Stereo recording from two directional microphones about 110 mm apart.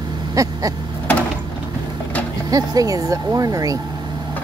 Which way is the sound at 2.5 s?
35° right (ahead or behind).